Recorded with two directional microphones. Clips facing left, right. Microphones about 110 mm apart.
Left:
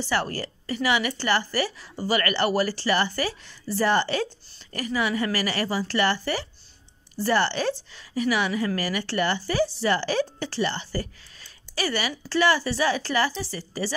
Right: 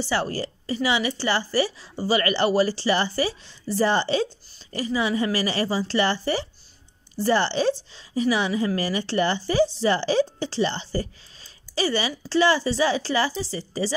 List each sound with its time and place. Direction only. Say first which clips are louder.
0.0 s a woman's voice: right 1 dB; 15° right (ahead or behind)